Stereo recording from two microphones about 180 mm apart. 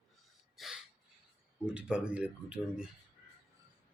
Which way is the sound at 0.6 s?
Centre (ahead or behind).